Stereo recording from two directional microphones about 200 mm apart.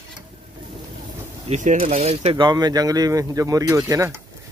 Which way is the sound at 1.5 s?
35° right (ahead or behind).